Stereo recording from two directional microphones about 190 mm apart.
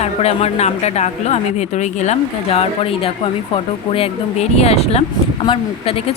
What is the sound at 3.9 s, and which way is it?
A woman's voice, 30° left (ahead or behind).